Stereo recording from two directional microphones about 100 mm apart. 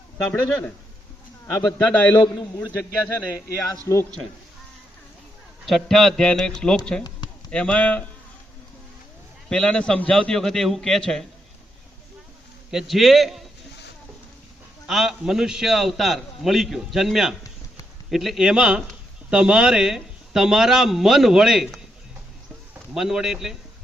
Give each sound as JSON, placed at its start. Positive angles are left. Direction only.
{"t": 0.3, "sound": "speech", "side_deg": 20}
{"t": 1.8, "sound": "a man's voice", "side_deg": 15}
{"t": 5.6, "sound": "a man's voice", "side_deg": 0}
{"t": 9.5, "sound": "a man's voice", "side_deg": 10}
{"t": 12.7, "sound": "a man's voice", "side_deg": 0}
{"t": 14.8, "sound": "a man's voice", "side_deg": -5}
{"t": 23.0, "sound": "a man's voice", "side_deg": -5}